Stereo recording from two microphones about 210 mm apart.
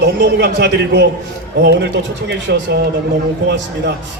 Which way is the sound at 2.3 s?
55° right (ahead or behind).